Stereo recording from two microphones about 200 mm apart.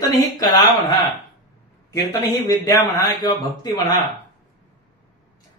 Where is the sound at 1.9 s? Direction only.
15° left (ahead or behind).